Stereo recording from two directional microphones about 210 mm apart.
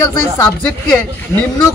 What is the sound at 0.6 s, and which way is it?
Speech, 5° left (ahead or behind).